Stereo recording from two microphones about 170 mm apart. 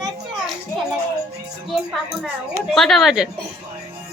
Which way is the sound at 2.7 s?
Centre (ahead or behind).